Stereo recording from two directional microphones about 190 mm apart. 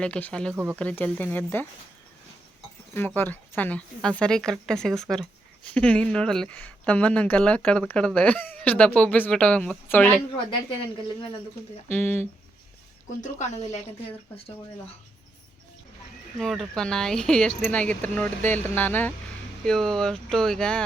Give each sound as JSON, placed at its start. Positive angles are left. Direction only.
{"t": 0.0, "sound": "speech", "side_deg": 5}
{"t": 0.5, "sound": "speech", "side_deg": -10}
{"t": 0.8, "sound": "a woman's voice", "side_deg": 5}
{"t": 2.9, "sound": "a woman's voice", "side_deg": 10}
{"t": 11.9, "sound": "a woman's voice", "side_deg": 10}
{"t": 13.2, "sound": "a woman's voice", "side_deg": 35}
{"t": 16.4, "sound": "a woman's voice", "side_deg": 0}